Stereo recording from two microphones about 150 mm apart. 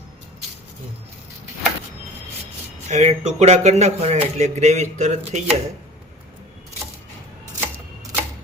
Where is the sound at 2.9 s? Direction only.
50° right (ahead or behind).